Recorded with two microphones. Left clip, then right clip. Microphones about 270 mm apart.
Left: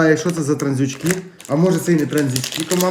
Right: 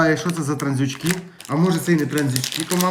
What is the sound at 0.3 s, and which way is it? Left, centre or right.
Speech, centre.